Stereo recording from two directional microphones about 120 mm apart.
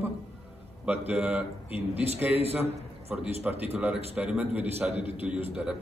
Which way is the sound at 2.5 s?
15° right (ahead or behind).